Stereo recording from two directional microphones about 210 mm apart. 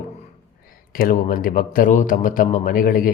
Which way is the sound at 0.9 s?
40° left (ahead or behind).